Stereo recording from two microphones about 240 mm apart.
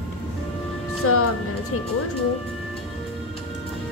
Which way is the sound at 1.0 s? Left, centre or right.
Left.